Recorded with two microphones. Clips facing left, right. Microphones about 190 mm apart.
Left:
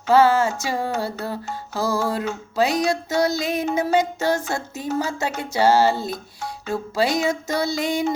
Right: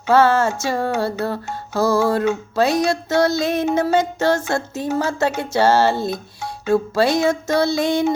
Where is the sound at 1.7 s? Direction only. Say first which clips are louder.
Right 6 dB; 75° right (ahead or behind).